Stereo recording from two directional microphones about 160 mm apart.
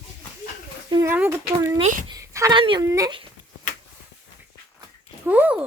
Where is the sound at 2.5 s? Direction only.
30° right (ahead or behind).